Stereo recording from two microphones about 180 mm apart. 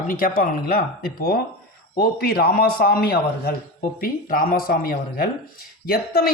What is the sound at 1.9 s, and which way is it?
A man's voice, 60° left (ahead or behind).